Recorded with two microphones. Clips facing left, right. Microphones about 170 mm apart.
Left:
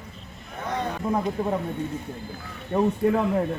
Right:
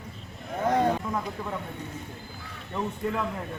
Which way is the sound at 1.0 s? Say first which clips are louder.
Left 7 dB; 35° left (ahead or behind).